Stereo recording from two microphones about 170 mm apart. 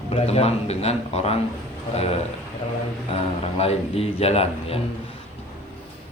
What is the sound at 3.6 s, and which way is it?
Speech, 35° left (ahead or behind).